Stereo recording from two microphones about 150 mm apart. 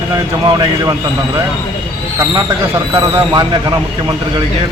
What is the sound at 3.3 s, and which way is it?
Speech, 25° right (ahead or behind).